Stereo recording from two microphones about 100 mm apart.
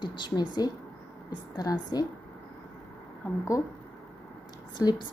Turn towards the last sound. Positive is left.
turn(degrees=40)  # may be behind; listen again after turning